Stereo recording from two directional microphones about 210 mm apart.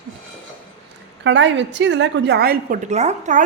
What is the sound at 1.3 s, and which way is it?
A woman's voice, 60° right (ahead or behind).